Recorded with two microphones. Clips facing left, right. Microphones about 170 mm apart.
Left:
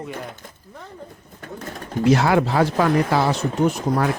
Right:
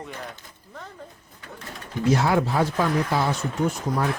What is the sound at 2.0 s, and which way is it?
Speech, 80° left.